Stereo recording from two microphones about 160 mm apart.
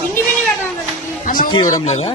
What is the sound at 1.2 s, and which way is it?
Speech, 60° left (ahead or behind).